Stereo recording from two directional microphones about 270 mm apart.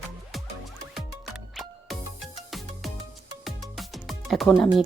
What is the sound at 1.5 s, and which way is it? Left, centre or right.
Music, centre.